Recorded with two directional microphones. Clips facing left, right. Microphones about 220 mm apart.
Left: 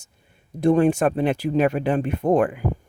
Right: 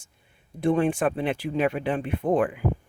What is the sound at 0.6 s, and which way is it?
Speech, 40° left (ahead or behind).